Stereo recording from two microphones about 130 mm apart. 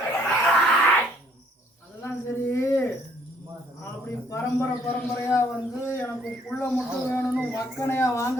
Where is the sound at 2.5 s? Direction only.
25° left (ahead or behind).